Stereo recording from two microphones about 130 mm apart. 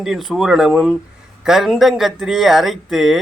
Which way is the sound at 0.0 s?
Centre (ahead or behind).